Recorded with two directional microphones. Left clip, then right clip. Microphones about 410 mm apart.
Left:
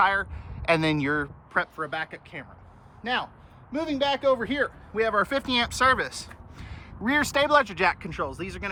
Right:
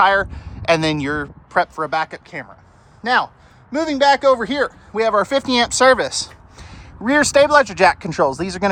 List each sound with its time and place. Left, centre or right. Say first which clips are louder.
0.0 s a man's voice: right 8 dB; centre